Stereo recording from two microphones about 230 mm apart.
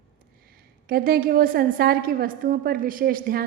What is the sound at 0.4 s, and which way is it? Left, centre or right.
A woman's voice, right.